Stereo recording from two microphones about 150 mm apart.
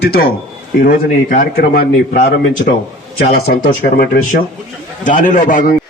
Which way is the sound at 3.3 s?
85° left.